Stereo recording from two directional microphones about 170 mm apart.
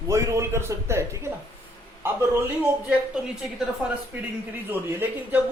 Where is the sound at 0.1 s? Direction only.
15° right (ahead or behind).